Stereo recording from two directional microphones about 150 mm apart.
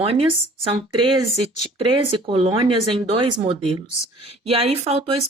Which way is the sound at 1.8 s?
35° right (ahead or behind).